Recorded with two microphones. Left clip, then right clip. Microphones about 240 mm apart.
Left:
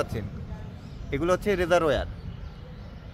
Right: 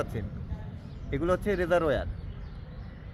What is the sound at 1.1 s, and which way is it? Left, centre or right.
Speech, centre.